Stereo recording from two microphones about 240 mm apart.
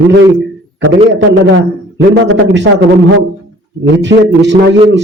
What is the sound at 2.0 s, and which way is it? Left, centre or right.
Speech, right.